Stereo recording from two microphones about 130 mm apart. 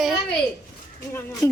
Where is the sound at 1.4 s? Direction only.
25° left (ahead or behind).